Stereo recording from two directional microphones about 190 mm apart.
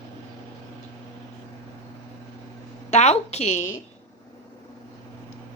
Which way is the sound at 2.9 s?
35° left (ahead or behind).